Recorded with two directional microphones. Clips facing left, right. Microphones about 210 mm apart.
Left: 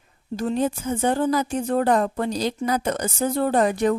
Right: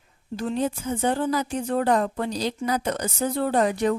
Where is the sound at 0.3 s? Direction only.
45° left (ahead or behind).